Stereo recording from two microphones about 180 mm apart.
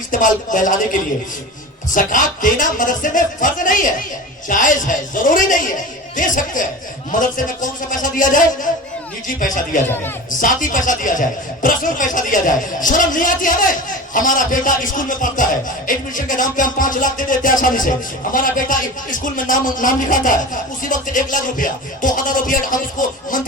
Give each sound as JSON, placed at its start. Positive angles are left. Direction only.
{"t": 0.1, "sound": "speech", "side_deg": 45}
{"t": 1.9, "sound": "speech", "side_deg": 45}